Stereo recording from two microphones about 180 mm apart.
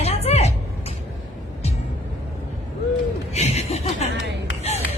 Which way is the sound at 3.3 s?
35° left (ahead or behind).